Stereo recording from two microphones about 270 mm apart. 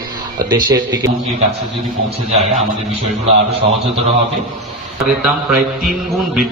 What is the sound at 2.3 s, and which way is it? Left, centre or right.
Speech, right.